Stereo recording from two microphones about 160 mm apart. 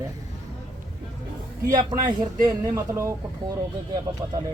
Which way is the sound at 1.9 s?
25° right (ahead or behind).